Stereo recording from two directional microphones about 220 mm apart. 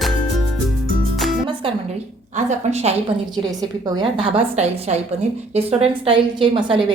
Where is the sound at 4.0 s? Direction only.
25° right (ahead or behind).